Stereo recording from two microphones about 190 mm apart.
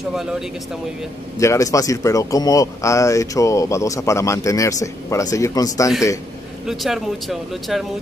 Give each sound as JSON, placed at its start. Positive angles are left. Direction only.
{"t": 1.4, "sound": "speech", "side_deg": 15}
{"t": 6.7, "sound": "speech", "side_deg": 0}